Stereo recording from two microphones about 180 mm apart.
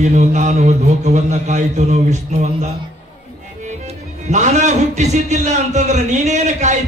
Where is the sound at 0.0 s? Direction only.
40° right (ahead or behind).